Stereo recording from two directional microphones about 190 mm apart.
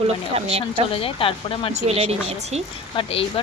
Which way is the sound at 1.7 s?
35° right (ahead or behind).